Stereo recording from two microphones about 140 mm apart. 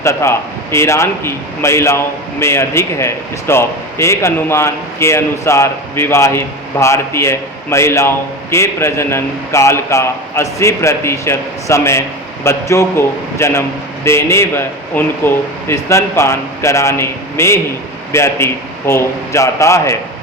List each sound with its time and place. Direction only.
0.0 s a man's voice: 20° left (ahead or behind)